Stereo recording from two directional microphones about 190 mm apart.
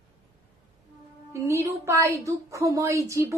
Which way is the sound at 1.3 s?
15° right (ahead or behind).